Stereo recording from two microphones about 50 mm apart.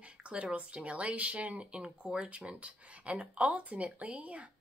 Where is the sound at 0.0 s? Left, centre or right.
Right.